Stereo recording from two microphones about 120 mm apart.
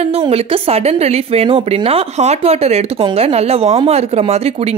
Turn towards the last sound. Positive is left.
turn(degrees=-60)  # may be behind; listen again after turning